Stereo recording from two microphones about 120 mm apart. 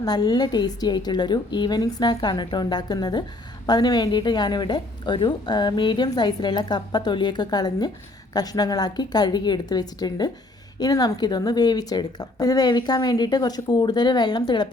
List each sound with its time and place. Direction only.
0.0 s a woman's voice: 35° left (ahead or behind)